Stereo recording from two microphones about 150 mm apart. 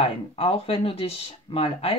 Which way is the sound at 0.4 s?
40° left (ahead or behind).